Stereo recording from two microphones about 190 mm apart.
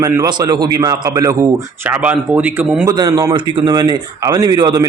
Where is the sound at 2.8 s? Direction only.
20° right (ahead or behind).